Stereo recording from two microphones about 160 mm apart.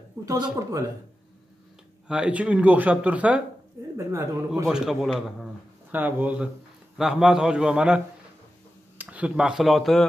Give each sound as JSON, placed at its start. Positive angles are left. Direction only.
{"t": 0.2, "sound": "speech", "side_deg": -20}
{"t": 2.0, "sound": "speech", "side_deg": -5}
{"t": 4.6, "sound": "a man's voice", "side_deg": -5}